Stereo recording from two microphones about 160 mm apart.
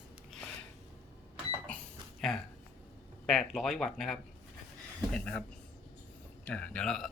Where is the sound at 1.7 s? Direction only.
5° left (ahead or behind).